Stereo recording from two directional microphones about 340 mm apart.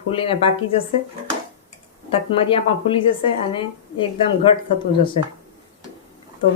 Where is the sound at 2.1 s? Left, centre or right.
Centre.